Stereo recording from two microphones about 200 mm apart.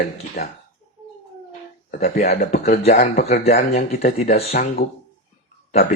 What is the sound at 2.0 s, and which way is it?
Speech, 35° left (ahead or behind).